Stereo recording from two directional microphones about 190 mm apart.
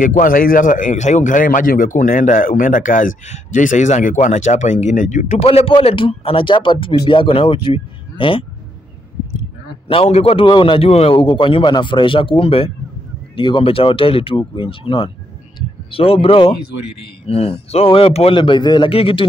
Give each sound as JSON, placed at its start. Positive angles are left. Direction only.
{"t": 0.0, "sound": "a man's voice", "side_deg": 45}
{"t": 9.8, "sound": "a man's voice", "side_deg": 30}